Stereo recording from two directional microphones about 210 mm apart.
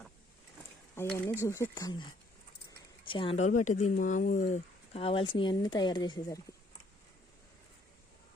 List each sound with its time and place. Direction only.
0.9 s speech: 10° left (ahead or behind)
3.1 s speech: 25° left (ahead or behind)